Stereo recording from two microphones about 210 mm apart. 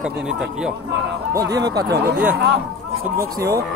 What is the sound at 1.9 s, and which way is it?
Speech, 50° right (ahead or behind).